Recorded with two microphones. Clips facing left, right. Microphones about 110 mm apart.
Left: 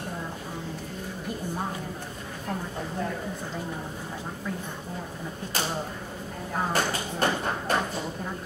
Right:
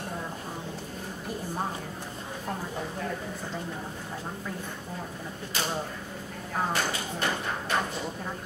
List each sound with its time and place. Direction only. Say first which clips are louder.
6.7 s tap: left 2 dB; 45° left (ahead or behind)